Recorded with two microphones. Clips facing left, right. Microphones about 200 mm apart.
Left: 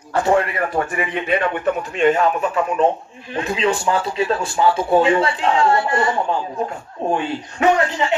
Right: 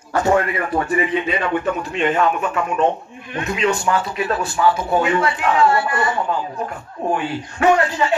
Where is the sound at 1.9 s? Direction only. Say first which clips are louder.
Left 2 dB; 40° left (ahead or behind).